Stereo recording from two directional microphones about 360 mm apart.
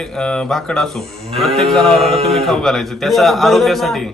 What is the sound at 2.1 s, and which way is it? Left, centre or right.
Speech, centre.